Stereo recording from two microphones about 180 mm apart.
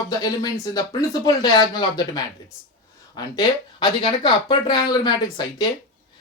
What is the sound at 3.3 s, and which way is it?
Speech, 25° left (ahead or behind).